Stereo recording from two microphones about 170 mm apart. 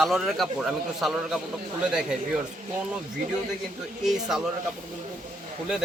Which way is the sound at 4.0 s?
Centre (ahead or behind).